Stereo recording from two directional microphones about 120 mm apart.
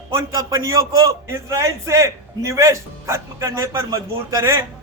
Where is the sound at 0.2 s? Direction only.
25° right (ahead or behind).